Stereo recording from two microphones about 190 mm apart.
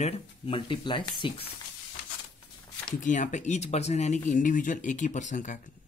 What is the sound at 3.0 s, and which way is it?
Speech, 40° left (ahead or behind).